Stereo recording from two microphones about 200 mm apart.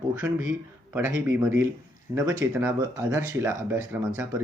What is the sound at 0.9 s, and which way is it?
Speech, 10° right (ahead or behind).